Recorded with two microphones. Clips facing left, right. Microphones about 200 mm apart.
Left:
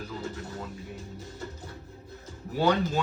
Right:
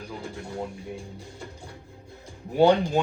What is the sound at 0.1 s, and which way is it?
Speech, 15° right (ahead or behind).